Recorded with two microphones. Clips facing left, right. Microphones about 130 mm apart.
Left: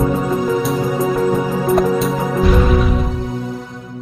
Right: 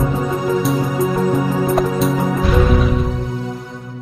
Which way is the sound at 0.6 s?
Centre (ahead or behind).